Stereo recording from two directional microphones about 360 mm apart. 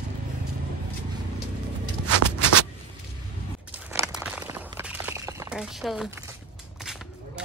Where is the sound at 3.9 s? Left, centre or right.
Centre.